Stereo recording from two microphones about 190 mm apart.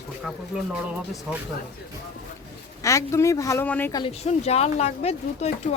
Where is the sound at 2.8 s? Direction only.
15° left (ahead or behind).